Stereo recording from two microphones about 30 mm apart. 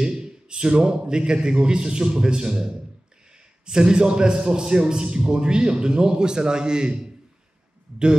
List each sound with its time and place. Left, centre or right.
0.0 s a man's voice: right